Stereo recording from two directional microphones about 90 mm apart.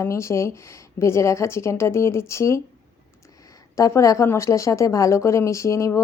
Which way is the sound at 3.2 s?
40° left (ahead or behind).